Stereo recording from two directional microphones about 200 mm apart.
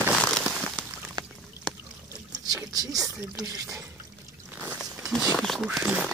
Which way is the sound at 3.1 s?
5° right (ahead or behind).